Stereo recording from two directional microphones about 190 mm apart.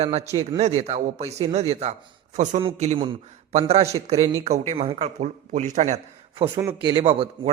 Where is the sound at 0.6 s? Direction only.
35° right (ahead or behind).